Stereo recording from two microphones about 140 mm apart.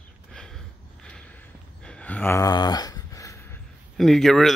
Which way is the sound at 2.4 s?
30° left (ahead or behind).